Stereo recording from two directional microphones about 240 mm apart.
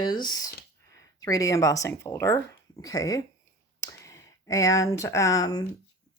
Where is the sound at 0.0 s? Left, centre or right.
Centre.